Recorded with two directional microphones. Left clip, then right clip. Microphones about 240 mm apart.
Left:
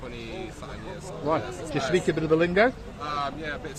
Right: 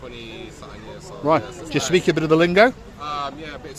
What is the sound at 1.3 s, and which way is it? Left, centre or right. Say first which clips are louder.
A man's voice: right 8 dB; right.